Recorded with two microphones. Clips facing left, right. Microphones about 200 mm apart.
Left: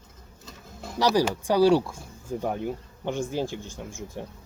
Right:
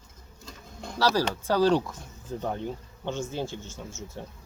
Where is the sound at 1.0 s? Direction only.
15° left (ahead or behind).